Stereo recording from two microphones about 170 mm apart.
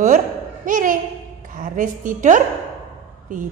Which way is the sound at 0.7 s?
50° right (ahead or behind).